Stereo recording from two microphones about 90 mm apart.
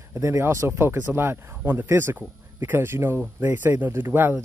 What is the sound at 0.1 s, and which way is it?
Speech, 30° right (ahead or behind).